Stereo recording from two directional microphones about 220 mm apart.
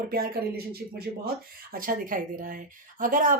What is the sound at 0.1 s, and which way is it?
Speech, 45° right (ahead or behind).